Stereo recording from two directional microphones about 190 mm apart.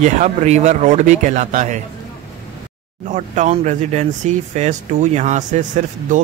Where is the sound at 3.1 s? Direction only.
40° right (ahead or behind).